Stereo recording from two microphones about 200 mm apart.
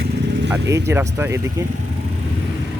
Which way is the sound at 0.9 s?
15° right (ahead or behind).